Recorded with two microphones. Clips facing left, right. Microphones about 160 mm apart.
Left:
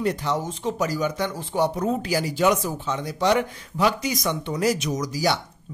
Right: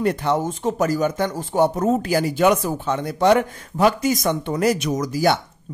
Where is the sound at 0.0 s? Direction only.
55° right (ahead or behind).